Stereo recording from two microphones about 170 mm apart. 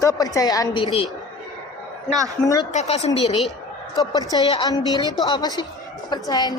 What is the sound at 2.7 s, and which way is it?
Speech, 40° left (ahead or behind).